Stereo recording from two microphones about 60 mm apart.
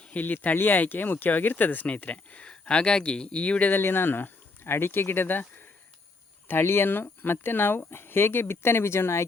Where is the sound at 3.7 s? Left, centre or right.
Left.